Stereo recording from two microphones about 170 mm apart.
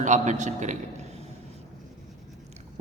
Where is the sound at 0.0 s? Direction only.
45° right (ahead or behind).